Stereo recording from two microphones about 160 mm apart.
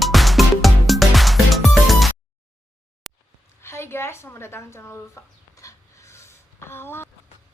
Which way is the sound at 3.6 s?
15° left (ahead or behind).